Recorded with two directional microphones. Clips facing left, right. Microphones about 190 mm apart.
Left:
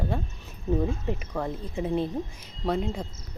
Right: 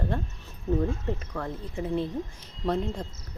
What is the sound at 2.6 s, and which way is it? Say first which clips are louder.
Speech: even; 5° left (ahead or behind).